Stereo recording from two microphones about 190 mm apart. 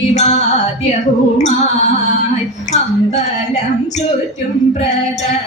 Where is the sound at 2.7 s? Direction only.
35° left (ahead or behind).